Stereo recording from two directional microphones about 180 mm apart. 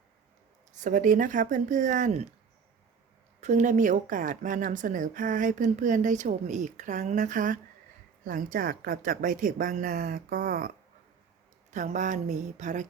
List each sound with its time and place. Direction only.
0.8 s a woman's voice: 45° right (ahead or behind)
3.4 s a woman's voice: 40° right (ahead or behind)
11.7 s a woman's voice: 45° right (ahead or behind)